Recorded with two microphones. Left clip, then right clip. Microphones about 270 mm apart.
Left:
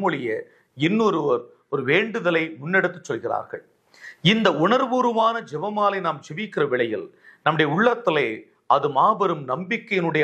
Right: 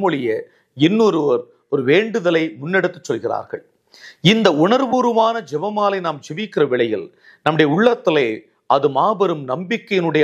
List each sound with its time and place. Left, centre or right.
0.0 s speech: right